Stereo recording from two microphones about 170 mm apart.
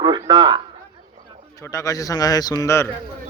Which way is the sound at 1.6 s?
20° left (ahead or behind).